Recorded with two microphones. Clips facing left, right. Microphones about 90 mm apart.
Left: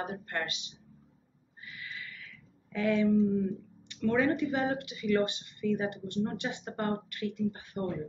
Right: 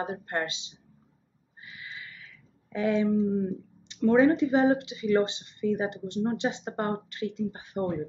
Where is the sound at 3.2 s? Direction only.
25° right (ahead or behind).